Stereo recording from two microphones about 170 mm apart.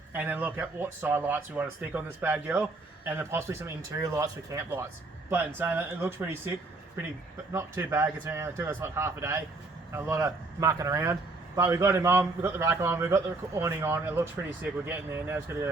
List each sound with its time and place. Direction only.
0.1 s a man's voice: 10° right (ahead or behind)
7.5 s a man's voice: 15° right (ahead or behind)